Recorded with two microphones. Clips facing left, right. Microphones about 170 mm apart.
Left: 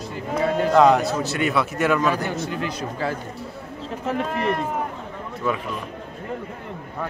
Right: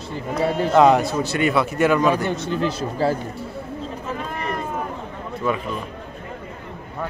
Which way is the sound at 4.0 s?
75° left (ahead or behind).